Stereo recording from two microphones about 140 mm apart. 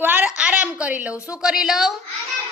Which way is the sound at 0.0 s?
15° right (ahead or behind).